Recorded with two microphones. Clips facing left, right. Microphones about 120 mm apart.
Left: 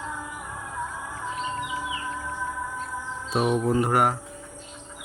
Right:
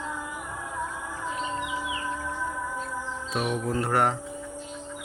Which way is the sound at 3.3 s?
25° left (ahead or behind).